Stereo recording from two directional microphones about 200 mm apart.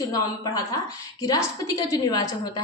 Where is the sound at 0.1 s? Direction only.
20° left (ahead or behind).